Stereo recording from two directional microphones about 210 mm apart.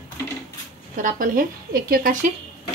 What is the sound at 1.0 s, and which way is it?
Speech, 40° right (ahead or behind).